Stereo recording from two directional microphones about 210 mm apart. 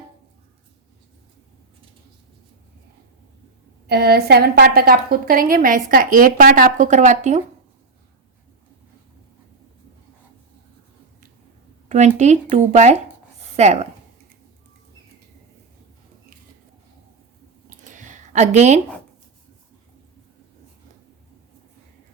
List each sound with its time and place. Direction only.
3.8 s a woman's voice: 50° right (ahead or behind); by 7.4 s 35° right (ahead or behind)
11.9 s speech: 35° right (ahead or behind)
17.7 s a sound: 35° right (ahead or behind)